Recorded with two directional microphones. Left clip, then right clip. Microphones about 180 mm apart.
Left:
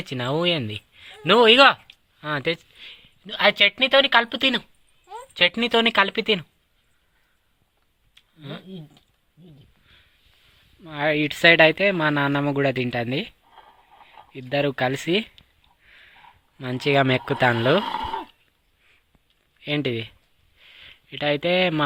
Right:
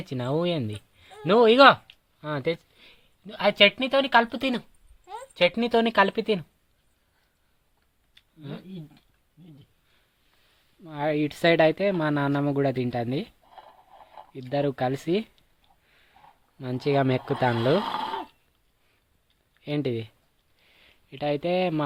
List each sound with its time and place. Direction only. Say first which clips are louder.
0.0 s speech: left 4 dB; 5° right (ahead or behind)
8.4 s speech: left 3 dB; 10° right (ahead or behind)
10.8 s speech: left 4 dB; 5° right (ahead or behind)
14.3 s speech: left 4 dB; 5° right (ahead or behind)
17.9 s speech: left 2 dB; 25° right (ahead or behind)
19.6 s speech: left 4 dB; 5° right (ahead or behind)
20.6 s a sound: left 12 dB; centre (ahead or behind)